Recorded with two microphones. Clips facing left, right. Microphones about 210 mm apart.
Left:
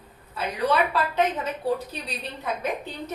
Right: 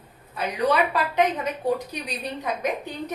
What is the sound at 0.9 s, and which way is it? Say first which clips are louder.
A woman's voice: right 1 dB; 15° right (ahead or behind).